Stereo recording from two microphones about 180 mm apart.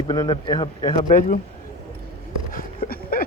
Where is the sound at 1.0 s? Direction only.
50° left (ahead or behind).